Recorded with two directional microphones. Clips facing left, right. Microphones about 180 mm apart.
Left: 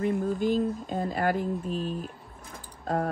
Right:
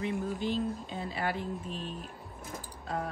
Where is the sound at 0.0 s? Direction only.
45° left (ahead or behind).